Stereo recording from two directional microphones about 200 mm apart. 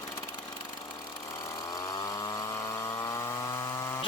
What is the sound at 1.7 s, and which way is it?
Chainsaw, 20° left (ahead or behind).